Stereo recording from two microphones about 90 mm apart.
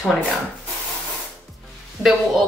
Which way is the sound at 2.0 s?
30° right (ahead or behind).